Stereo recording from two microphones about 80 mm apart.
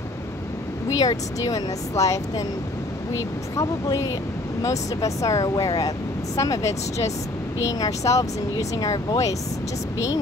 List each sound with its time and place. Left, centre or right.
0.8 s speech: left
3.5 s speech: left